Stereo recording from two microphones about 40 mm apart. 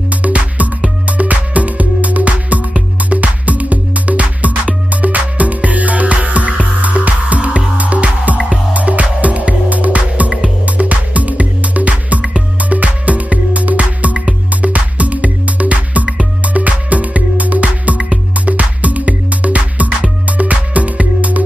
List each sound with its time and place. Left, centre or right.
0.1 s music: right